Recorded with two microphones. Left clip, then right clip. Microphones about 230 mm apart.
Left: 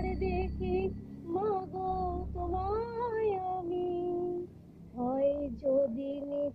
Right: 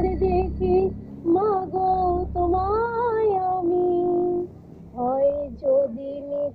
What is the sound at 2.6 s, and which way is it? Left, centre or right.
Music, right.